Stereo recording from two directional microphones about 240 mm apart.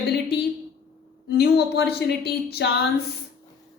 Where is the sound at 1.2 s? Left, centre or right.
Left.